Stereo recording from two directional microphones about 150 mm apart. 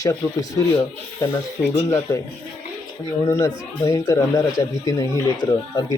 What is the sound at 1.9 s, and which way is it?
Speech, 25° left (ahead or behind).